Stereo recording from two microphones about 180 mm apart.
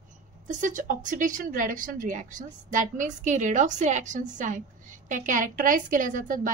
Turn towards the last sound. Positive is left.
turn(degrees=-50)  # may be behind; listen again after turning